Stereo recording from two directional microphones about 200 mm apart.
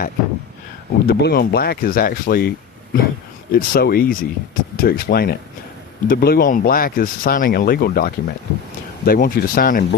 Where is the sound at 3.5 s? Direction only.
50° left (ahead or behind).